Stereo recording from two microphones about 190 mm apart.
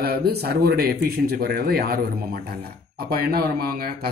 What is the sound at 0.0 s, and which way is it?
A man's voice, 55° right (ahead or behind).